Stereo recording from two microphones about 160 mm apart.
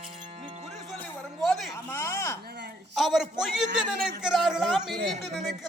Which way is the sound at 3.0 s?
Centre (ahead or behind).